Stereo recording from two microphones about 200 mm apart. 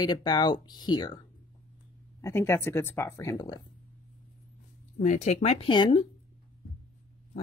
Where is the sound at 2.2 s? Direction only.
10° left (ahead or behind).